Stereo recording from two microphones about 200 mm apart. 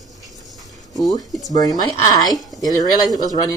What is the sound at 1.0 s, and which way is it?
Speech, centre (ahead or behind).